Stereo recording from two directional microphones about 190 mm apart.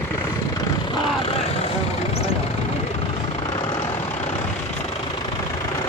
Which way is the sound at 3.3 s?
25° left (ahead or behind).